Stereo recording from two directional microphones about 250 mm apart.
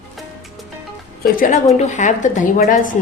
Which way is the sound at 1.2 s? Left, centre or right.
Left.